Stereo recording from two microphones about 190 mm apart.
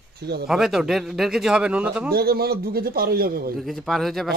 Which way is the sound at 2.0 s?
55° right (ahead or behind).